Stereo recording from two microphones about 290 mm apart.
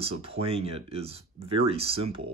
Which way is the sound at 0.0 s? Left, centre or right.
Centre.